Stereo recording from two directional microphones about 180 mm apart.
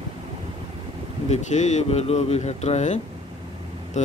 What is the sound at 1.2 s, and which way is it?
Speech, 40° left (ahead or behind).